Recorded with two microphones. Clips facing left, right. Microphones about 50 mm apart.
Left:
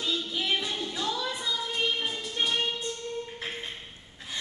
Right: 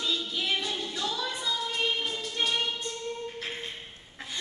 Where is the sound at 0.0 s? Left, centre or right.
Left.